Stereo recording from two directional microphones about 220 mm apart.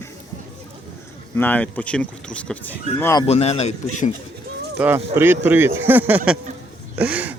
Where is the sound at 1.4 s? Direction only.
5° left (ahead or behind).